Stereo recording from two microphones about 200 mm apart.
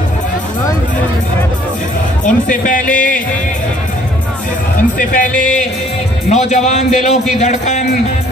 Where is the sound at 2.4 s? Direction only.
40° left (ahead or behind).